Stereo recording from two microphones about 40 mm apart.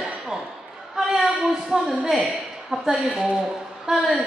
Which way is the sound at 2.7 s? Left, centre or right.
Right.